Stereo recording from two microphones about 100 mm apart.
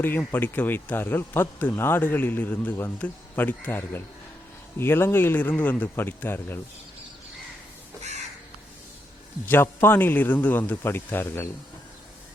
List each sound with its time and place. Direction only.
0.0 s speech: 20° left (ahead or behind)
9.5 s speech: 20° left (ahead or behind)